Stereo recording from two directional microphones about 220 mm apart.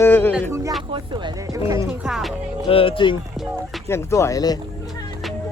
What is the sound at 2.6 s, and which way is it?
Speech, 25° left (ahead or behind).